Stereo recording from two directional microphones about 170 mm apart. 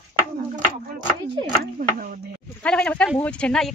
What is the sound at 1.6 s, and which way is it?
Speech, 55° right (ahead or behind).